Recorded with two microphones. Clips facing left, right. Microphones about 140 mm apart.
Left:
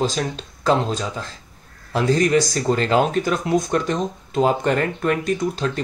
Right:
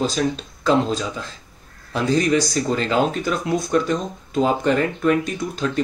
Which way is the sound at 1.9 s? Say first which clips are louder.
Left 1 dB; 35° left (ahead or behind).